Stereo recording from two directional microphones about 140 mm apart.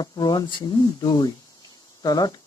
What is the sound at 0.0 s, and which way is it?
Speech, 30° left (ahead or behind).